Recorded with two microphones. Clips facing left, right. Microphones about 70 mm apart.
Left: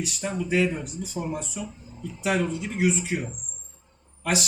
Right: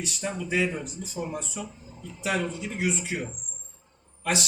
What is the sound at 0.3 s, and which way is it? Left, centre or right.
Speech, centre.